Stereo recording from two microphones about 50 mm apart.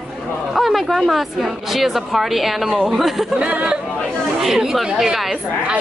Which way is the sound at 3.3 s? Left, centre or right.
Right.